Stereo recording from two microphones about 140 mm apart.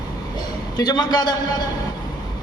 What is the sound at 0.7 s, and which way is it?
Speech, 30° left (ahead or behind).